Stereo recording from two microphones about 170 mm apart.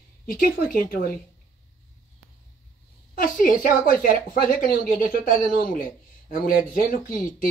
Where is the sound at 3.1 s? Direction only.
55° left (ahead or behind).